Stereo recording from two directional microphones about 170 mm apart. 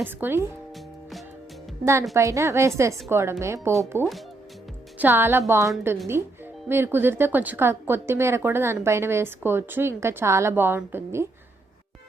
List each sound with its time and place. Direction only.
0.0 s a woman's voice: 10° right (ahead or behind)
1.8 s a woman's voice: 15° right (ahead or behind)
4.9 s a woman's voice: 10° right (ahead or behind)